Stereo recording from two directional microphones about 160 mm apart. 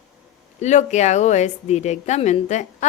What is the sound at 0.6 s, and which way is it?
A woman's voice, 45° left (ahead or behind).